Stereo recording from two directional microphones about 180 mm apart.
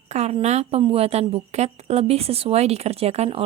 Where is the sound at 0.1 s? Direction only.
35° right (ahead or behind).